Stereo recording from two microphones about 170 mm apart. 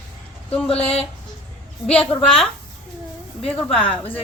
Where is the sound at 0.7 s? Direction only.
35° left (ahead or behind).